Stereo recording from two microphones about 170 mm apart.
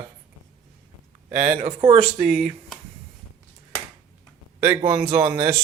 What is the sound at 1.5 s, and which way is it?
Speech, 35° right (ahead or behind).